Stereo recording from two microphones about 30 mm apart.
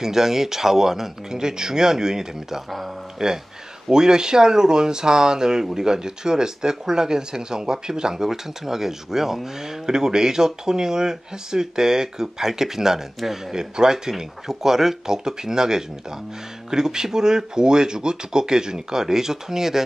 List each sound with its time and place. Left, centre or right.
0.0 s speech: centre